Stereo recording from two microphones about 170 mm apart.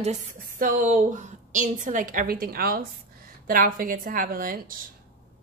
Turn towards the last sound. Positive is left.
turn(degrees=-55)  # may be behind; listen again after turning